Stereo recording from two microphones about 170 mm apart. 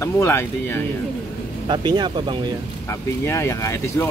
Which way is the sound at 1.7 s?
25° right (ahead or behind).